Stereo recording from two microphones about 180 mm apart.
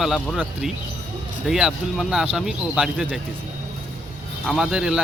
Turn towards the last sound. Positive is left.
turn(degrees=-5)  # may be behind; listen again after turning